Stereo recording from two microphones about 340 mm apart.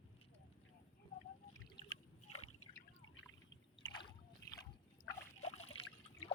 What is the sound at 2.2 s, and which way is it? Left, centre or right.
Water, left.